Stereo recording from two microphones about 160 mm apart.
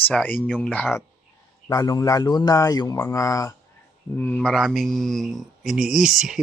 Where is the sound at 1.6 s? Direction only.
25° left (ahead or behind).